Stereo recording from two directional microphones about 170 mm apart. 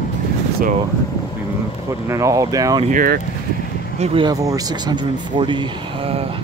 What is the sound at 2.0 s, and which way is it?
Speech, 20° right (ahead or behind).